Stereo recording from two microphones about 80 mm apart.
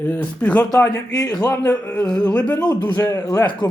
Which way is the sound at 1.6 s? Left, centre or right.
Centre.